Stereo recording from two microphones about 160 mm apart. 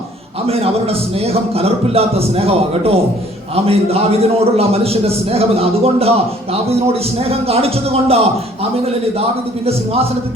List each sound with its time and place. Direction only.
0.4 s a man's voice: 40° right (ahead or behind)